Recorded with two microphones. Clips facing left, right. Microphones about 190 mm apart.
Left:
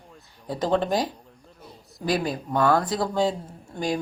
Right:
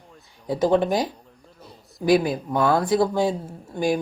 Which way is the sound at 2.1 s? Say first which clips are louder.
Right 6 dB; 10° right (ahead or behind).